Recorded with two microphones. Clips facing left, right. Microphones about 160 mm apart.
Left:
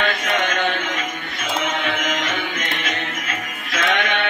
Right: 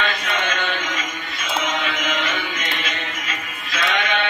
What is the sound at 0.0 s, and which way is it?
Mantra, 55° left (ahead or behind).